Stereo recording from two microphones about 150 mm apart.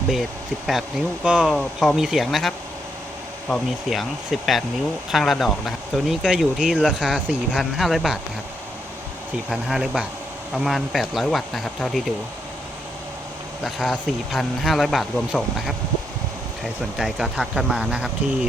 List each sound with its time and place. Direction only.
0.7 s speech: 5° right (ahead or behind)
3.5 s speech: centre (ahead or behind)
9.5 s speech: centre (ahead or behind)
13.7 s speech: centre (ahead or behind)
17.0 s speech: centre (ahead or behind)